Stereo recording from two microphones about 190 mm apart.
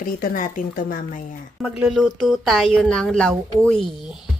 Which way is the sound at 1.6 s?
5° right (ahead or behind).